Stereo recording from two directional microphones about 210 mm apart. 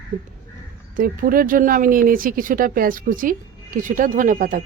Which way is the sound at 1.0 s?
45° right (ahead or behind).